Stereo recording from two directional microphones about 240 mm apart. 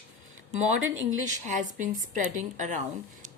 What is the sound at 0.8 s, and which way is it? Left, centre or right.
Speech, right.